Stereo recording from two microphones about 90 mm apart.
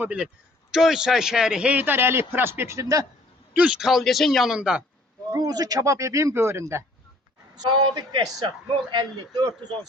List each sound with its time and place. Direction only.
0.0 s a man's voice: 15° right (ahead or behind); by 3.1 s 35° right (ahead or behind)
3.5 s speech: 15° right (ahead or behind)
5.3 s speech: 45° right (ahead or behind); by 6.8 s 30° right (ahead or behind)
7.5 s a man's voice: 55° right (ahead or behind)
8.3 s speech: 50° right (ahead or behind)